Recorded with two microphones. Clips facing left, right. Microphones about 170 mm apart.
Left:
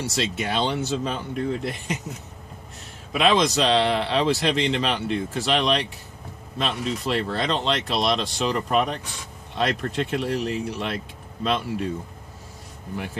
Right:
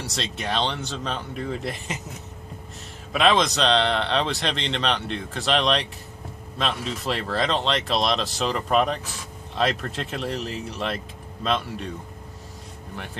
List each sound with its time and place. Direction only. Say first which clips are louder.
0.0 s a man's voice: left 4 dB; 5° left (ahead or behind)
3.1 s a man's voice: even; centre (ahead or behind)
12.9 s a man's voice: left 6 dB; 5° left (ahead or behind)